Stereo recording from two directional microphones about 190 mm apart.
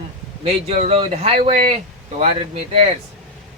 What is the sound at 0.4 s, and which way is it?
Speech, 30° right (ahead or behind).